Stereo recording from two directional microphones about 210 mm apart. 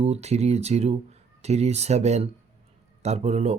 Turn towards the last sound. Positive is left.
turn(degrees=-30)  # may be behind; listen again after turning